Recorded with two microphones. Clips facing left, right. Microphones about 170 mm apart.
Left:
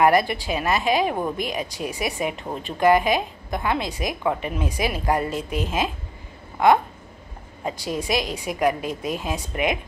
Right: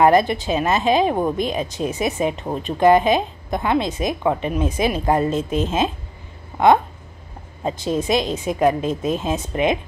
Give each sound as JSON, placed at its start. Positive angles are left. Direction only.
{"t": 0.0, "sound": "speech", "side_deg": -25}
{"t": 7.6, "sound": "speech", "side_deg": -25}